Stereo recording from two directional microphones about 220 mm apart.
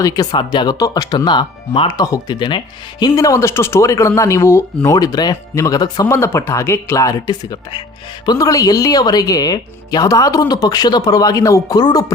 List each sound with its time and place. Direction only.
0.0 s speech: 15° left (ahead or behind)